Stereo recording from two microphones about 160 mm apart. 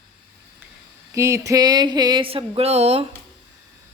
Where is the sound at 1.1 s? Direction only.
20° right (ahead or behind); by 3.1 s 40° right (ahead or behind).